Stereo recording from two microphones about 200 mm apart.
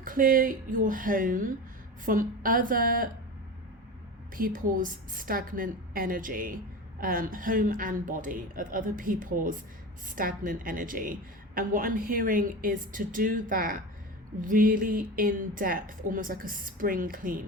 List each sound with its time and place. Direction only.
0.0 s a woman's voice: 45° right (ahead or behind)
4.4 s a woman's voice: 45° right (ahead or behind)